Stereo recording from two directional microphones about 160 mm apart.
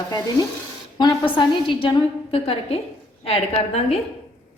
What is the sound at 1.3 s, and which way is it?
A woman's voice, 30° left (ahead or behind).